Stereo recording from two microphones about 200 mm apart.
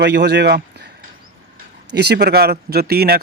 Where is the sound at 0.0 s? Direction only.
60° right (ahead or behind).